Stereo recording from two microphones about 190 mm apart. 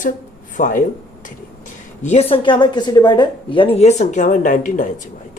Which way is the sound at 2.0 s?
35° left (ahead or behind).